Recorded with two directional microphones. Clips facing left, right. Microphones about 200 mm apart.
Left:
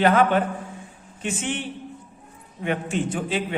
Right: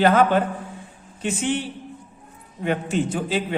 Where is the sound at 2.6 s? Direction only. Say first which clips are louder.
Right 2 dB; 40° right (ahead or behind).